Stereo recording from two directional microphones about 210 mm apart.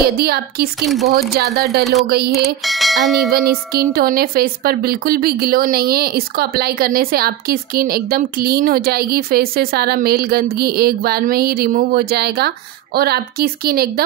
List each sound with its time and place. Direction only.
0.0 s a woman's voice: 50° right (ahead or behind)
2.4 s bell: centre (ahead or behind)
3.3 s a woman's voice: 45° right (ahead or behind)